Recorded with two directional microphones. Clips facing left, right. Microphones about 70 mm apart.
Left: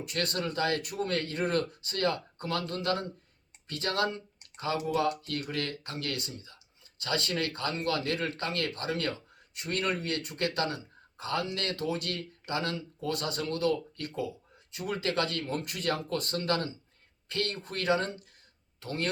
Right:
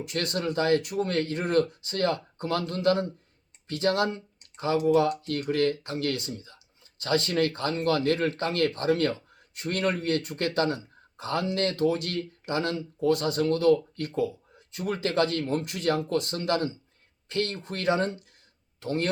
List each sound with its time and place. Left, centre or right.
0.0 s speech: right